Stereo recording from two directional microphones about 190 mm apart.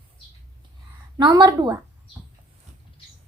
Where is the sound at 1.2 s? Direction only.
20° right (ahead or behind).